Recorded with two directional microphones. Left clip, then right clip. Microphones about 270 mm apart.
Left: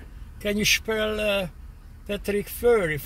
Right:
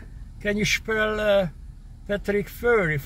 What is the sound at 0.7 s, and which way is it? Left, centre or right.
Speech, centre.